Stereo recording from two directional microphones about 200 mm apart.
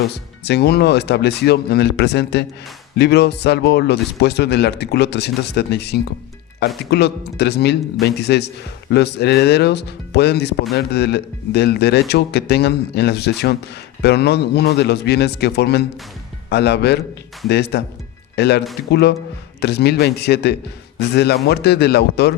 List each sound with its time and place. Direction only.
0.1 s speech: 55° left (ahead or behind)